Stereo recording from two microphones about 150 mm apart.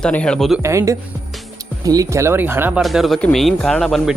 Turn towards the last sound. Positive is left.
turn(degrees=0)  # may be behind; listen again after turning